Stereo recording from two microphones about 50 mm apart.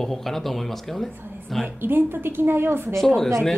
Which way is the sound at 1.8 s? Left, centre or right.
Right.